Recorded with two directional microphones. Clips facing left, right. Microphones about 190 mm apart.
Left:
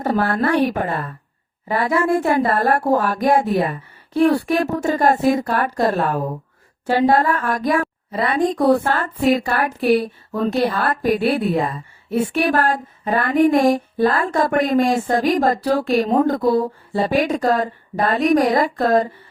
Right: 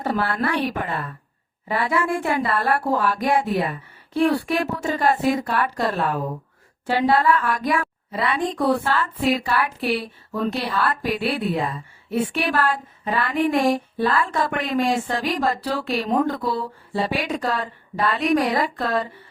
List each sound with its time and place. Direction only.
0.0 s a woman's voice: 45° left (ahead or behind)